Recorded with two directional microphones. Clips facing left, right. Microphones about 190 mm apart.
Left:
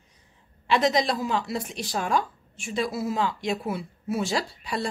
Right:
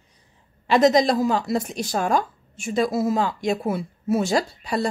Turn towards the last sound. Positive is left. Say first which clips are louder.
# right 6 dB
turn(degrees=-45)  # may be behind; listen again after turning